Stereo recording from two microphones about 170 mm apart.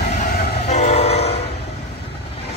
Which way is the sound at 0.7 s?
40° left (ahead or behind).